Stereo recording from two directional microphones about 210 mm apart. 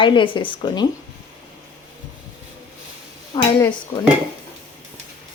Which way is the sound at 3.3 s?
20° left (ahead or behind).